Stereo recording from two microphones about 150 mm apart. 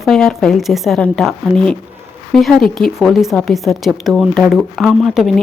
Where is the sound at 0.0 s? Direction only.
Centre (ahead or behind).